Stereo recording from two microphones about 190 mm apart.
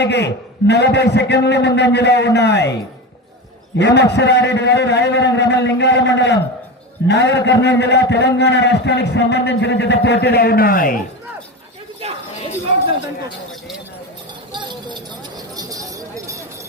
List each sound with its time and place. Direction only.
0.0 s a man's voice: 65° left (ahead or behind)
3.8 s a man's voice: 60° left (ahead or behind)
12.0 s a sound: 35° right (ahead or behind)
14.5 s jingle bell: 25° right (ahead or behind)